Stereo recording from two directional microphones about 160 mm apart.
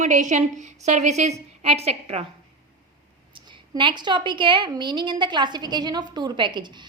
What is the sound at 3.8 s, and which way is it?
A woman's voice, 30° right (ahead or behind).